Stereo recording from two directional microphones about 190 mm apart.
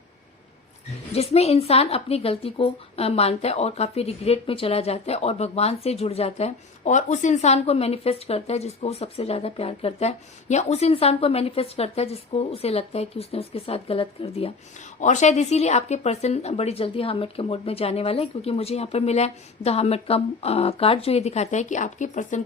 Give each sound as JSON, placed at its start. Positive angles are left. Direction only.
{"t": 1.1, "sound": "speech", "side_deg": 35}